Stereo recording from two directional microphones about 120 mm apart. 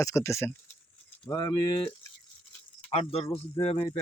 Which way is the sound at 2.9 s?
55° left (ahead or behind).